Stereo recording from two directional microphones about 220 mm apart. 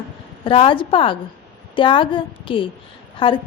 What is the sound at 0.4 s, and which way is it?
A woman's voice, 25° left (ahead or behind).